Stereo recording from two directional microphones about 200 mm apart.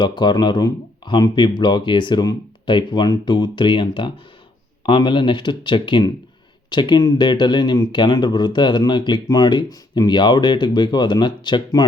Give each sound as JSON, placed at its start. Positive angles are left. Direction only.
{"t": 0.0, "sound": "speech", "side_deg": 25}